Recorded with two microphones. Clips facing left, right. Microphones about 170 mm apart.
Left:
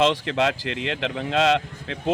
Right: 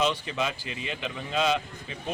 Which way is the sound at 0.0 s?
90° left.